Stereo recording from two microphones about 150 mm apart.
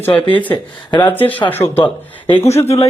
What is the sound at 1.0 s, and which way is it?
Speech, 10° left (ahead or behind).